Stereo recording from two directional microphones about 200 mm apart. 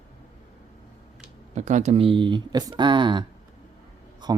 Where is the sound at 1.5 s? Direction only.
35° right (ahead or behind).